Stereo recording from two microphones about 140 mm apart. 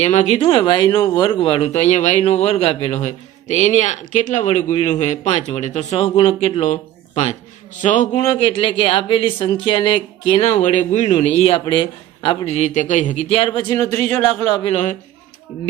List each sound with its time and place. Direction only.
0.0 s speech: 55° left (ahead or behind); by 1.2 s 20° left (ahead or behind)
1.2 s a man's voice: 35° left (ahead or behind)
7.8 s a man's voice: 60° left (ahead or behind)
8.1 s speech: 45° left (ahead or behind)
11.6 s speech: 35° left (ahead or behind)
12.5 s speech: 55° left (ahead or behind); by 14.8 s 40° left (ahead or behind)